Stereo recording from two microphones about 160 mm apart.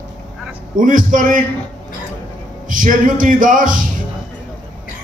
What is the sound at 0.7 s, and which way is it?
Speech, 55° right (ahead or behind).